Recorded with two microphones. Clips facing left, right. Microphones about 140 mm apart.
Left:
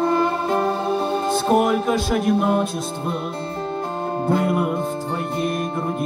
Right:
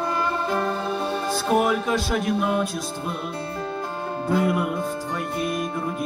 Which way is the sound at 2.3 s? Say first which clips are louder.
Left 4 dB; 40° left (ahead or behind).